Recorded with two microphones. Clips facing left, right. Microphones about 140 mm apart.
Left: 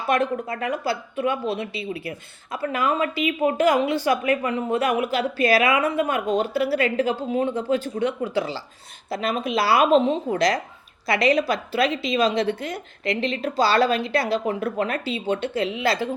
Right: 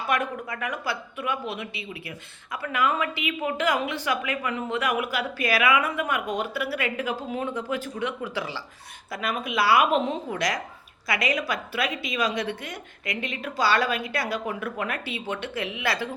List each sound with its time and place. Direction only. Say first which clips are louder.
0.1 s a woman's voice: left 6 dB; 30° left (ahead or behind)